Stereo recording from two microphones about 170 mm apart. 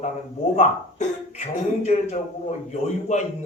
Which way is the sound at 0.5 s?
40° left (ahead or behind).